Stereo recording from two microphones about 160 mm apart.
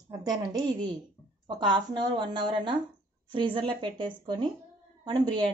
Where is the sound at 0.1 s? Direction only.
25° right (ahead or behind).